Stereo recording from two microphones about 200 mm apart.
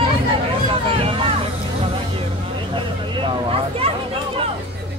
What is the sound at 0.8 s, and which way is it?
Vehicle, 30° right (ahead or behind).